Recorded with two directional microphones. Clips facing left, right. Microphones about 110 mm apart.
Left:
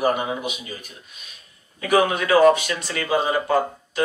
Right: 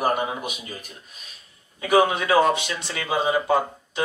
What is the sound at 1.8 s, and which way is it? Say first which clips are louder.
Speech: even; 25° right (ahead or behind).